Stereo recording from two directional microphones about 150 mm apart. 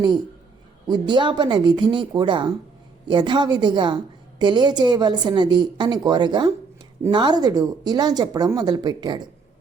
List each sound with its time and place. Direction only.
0.9 s a woman's voice: 30° right (ahead or behind)